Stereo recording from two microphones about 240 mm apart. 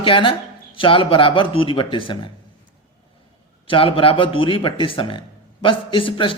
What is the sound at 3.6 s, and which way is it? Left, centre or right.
Speech, left.